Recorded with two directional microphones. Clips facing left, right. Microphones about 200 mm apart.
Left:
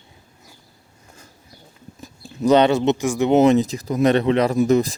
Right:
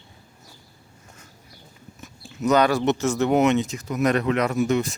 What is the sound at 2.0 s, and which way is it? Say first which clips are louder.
Speech: left 4 dB; 30° left (ahead or behind).